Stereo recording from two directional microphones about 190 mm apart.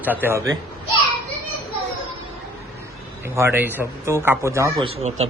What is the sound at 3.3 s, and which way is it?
Speech, 15° right (ahead or behind).